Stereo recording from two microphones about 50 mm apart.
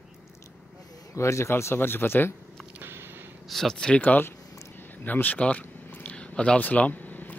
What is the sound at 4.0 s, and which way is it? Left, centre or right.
Speech, left.